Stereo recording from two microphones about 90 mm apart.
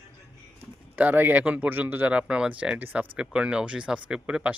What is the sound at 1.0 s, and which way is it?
Speech, 20° right (ahead or behind).